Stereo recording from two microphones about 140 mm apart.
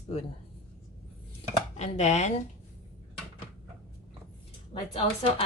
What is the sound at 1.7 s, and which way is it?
Speech, 55° left (ahead or behind).